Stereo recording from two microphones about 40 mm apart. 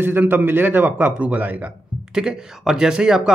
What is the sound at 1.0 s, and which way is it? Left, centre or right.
Speech, right.